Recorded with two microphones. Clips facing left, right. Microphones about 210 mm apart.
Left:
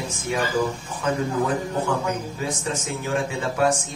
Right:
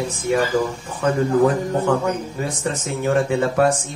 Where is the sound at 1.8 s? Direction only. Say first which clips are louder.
Right 5 dB; 60° right (ahead or behind).